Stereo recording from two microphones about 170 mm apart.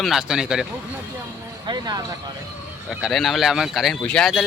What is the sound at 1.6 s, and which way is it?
Speech, 25° right (ahead or behind).